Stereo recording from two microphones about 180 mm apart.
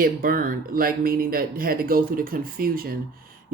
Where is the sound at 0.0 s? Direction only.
50° right (ahead or behind).